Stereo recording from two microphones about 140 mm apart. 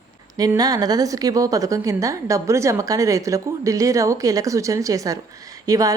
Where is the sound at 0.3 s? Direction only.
25° right (ahead or behind).